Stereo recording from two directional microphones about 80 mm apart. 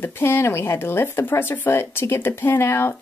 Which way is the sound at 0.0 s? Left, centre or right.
Left.